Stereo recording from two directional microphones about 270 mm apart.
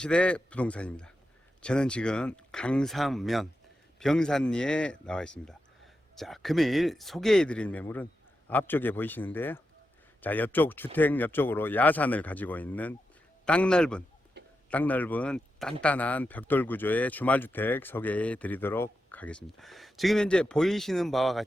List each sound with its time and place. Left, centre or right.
0.0 s speech: centre
14.4 s a sound: right
14.7 s speech: centre